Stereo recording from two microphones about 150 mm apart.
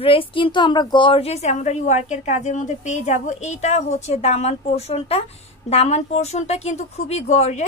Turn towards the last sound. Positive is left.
turn(degrees=50)  # may be behind; listen again after turning